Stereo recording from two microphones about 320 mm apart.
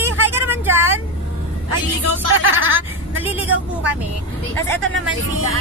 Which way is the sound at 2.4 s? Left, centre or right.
Right.